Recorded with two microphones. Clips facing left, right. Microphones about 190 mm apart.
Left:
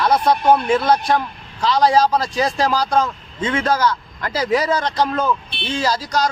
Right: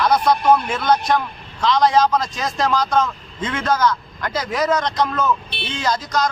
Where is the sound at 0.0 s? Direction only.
30° left (ahead or behind).